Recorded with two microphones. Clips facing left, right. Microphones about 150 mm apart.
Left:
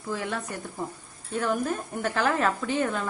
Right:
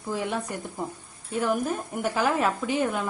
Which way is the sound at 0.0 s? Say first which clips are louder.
Right 2 dB; 15° right (ahead or behind).